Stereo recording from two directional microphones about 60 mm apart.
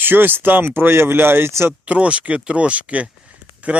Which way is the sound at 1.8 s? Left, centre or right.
Right.